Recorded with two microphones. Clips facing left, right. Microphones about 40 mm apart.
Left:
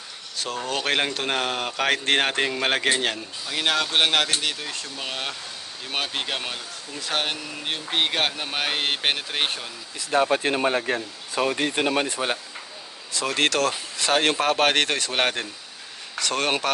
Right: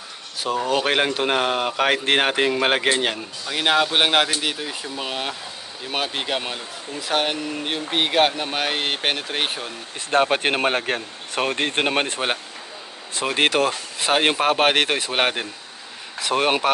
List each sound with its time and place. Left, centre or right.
0.4 s speech: centre
9.9 s speech: right
13.1 s speech: right